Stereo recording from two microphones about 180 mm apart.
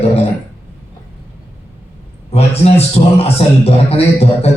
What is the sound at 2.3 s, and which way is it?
A man's voice, 35° left (ahead or behind).